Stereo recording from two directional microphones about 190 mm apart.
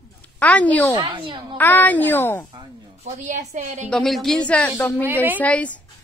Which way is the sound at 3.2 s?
40° right (ahead or behind).